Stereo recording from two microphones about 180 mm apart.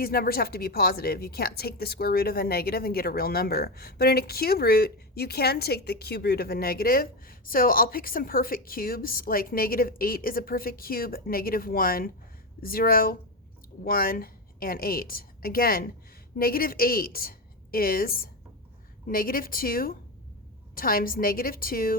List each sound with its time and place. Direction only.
0.0 s a woman's voice: 60° left (ahead or behind)